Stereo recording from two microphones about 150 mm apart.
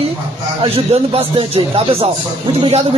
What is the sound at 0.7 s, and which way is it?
Speech, 40° right (ahead or behind).